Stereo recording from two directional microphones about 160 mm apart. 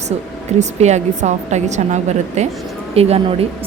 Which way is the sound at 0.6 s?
45° right (ahead or behind).